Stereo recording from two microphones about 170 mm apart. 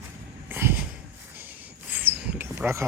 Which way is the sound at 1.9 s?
10° right (ahead or behind).